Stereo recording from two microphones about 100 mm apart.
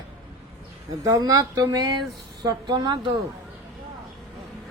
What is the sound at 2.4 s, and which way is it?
Speech, 50° right (ahead or behind).